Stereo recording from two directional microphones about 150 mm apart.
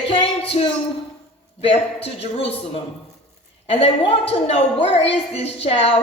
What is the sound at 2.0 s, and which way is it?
A woman's voice, 40° left (ahead or behind).